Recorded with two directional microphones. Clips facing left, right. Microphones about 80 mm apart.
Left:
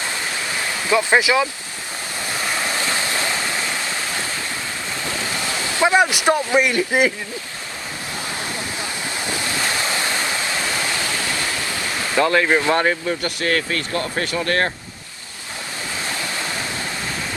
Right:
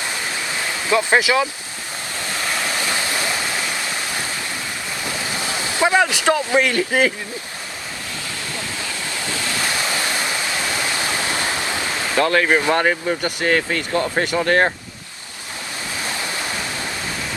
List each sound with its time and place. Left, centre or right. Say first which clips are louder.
0.0 s a sound: even; centre
1.1 s speech: even; left
2.2 s waves: even; centre
2.8 s stream: even; centre
5.0 s a sound: even; centre
5.8 s a sound: left 1 dB; left
6.1 s speech: even; centre
8.5 s waves: left 1 dB; left
10.2 s waterfall: even; centre
10.6 s a sound: even; right
12.2 s speech: even; centre
12.5 s speech: even; centre
16.0 s waves: right 1 dB; right